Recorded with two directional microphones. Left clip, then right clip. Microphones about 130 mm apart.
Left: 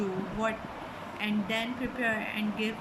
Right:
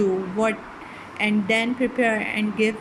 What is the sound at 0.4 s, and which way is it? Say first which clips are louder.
A woman's voice: right 8 dB; 45° right (ahead or behind).